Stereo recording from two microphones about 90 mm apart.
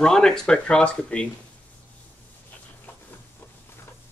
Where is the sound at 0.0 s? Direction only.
5° left (ahead or behind).